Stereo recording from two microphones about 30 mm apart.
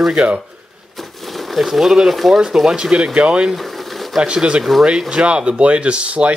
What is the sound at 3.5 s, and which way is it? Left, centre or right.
Pigeon, centre.